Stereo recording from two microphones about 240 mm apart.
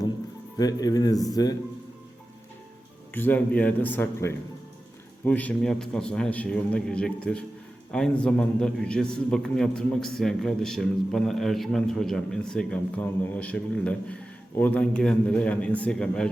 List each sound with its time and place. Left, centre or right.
0.5 s speech: centre
3.2 s a man's voice: centre